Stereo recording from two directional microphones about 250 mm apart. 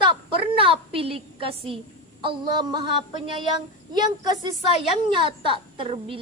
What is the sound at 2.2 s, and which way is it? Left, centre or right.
Speech, centre.